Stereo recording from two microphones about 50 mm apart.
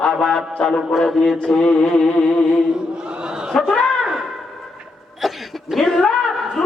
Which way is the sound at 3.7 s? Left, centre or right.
Left.